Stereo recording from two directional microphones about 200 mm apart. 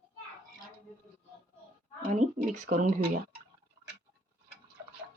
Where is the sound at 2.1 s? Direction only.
40° right (ahead or behind).